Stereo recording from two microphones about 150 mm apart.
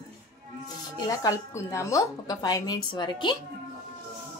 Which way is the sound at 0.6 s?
25° left (ahead or behind).